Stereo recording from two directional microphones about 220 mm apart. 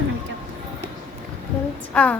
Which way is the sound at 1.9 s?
5° left (ahead or behind).